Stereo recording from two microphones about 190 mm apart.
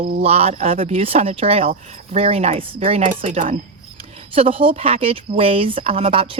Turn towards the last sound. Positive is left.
turn(degrees=-30)  # may be behind; listen again after turning